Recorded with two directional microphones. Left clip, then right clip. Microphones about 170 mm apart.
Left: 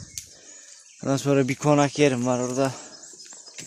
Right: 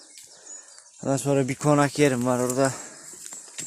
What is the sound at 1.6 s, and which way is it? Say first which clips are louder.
Speech: right 1 dB; 5° left (ahead or behind).